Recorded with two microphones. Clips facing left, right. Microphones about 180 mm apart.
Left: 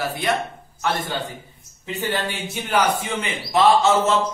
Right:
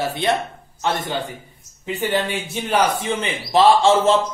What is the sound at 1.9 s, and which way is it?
Speech, 15° right (ahead or behind).